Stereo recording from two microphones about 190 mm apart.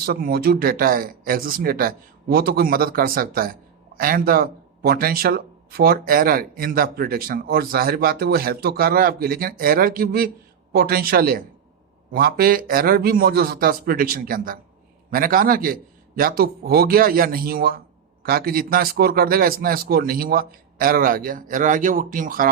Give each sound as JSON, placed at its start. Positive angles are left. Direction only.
{"t": 0.0, "sound": "speech", "side_deg": -55}